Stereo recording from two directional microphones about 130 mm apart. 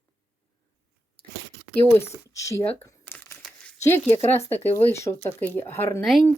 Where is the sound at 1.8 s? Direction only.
20° left (ahead or behind).